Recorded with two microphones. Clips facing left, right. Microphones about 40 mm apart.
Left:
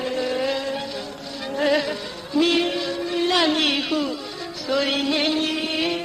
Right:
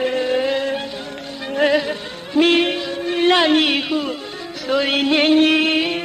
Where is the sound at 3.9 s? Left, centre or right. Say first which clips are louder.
Right 2 dB; centre.